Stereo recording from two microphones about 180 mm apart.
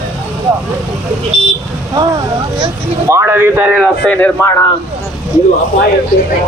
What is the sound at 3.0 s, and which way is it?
Speech, 15° right (ahead or behind).